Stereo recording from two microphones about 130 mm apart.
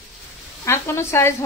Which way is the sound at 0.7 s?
20° left (ahead or behind).